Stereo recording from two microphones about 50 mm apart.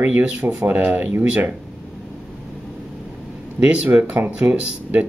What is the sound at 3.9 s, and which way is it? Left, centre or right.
Speech, right.